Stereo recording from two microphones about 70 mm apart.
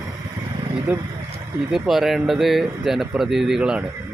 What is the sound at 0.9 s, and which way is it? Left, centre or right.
Speech, right.